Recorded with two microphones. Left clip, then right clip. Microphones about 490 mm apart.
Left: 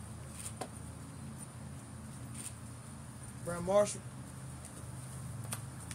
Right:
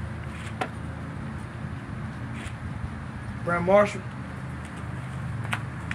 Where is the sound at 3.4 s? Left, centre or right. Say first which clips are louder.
Right 10 dB; left.